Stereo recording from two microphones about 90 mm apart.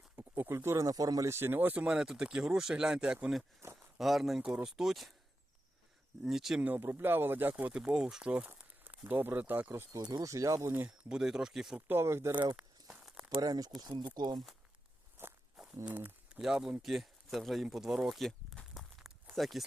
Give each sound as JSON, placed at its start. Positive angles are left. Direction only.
{"t": 0.2, "sound": "speech", "side_deg": -30}
{"t": 1.3, "sound": "speech", "side_deg": -25}
{"t": 6.2, "sound": "speech", "side_deg": -5}
{"t": 6.6, "sound": "speech", "side_deg": -20}
{"t": 7.5, "sound": "speech", "side_deg": -10}
{"t": 9.9, "sound": "speech", "side_deg": -40}
{"t": 10.7, "sound": "speech", "side_deg": -20}
{"t": 11.1, "sound": "speech", "side_deg": -5}
{"t": 11.9, "sound": "speech", "side_deg": -25}
{"t": 12.5, "sound": "a sound", "side_deg": -5}
{"t": 13.4, "sound": "speech", "side_deg": -45}
{"t": 15.9, "sound": "speech", "side_deg": -20}
{"t": 16.3, "sound": "speech", "side_deg": -10}
{"t": 16.8, "sound": "a sound", "side_deg": 0}